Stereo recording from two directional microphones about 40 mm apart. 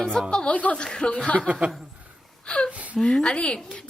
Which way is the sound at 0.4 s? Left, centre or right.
Left.